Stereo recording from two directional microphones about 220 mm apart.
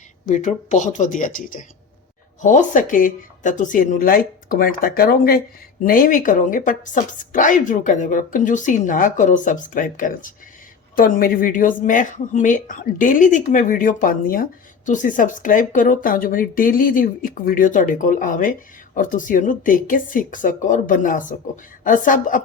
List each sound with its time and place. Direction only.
0.3 s a woman's voice: 35° left (ahead or behind)